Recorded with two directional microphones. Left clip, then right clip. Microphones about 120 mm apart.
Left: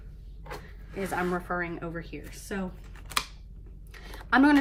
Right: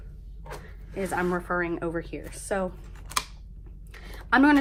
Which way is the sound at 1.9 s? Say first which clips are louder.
Right 6 dB; 35° right (ahead or behind).